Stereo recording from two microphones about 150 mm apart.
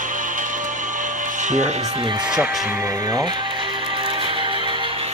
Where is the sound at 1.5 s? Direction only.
55° right (ahead or behind).